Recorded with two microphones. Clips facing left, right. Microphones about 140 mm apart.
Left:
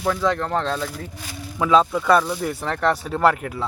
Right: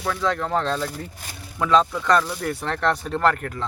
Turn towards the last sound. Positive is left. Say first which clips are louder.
# left 2 dB
turn(degrees=5)  # may be behind; listen again after turning